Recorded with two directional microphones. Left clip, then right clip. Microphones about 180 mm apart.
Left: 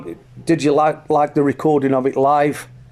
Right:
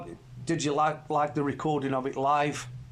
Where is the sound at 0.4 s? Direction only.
45° left (ahead or behind).